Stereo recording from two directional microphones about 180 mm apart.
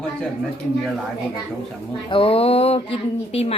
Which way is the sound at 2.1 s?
30° left (ahead or behind).